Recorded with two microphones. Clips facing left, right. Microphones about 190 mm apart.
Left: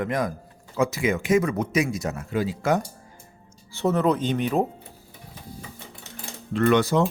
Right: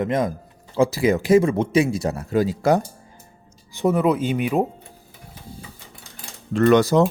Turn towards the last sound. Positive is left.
turn(degrees=-40)  # may be behind; listen again after turning